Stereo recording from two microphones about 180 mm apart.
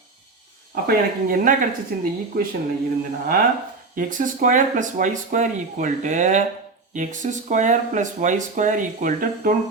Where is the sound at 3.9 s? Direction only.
45° right (ahead or behind).